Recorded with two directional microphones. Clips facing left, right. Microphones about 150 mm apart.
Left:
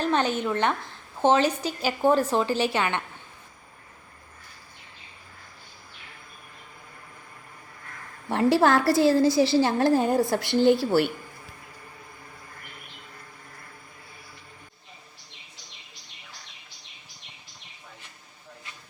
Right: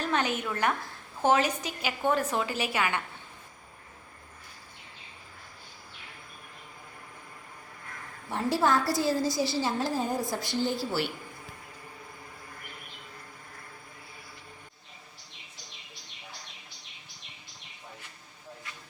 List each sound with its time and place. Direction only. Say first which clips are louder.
0.0 s a woman's voice: left 5 dB; 30° left (ahead or behind)
8.3 s a woman's voice: left 6 dB; 75° left (ahead or behind); by 11.1 s 60° left (ahead or behind)